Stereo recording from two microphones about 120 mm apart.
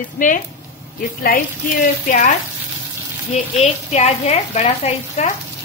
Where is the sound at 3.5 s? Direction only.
65° left (ahead or behind).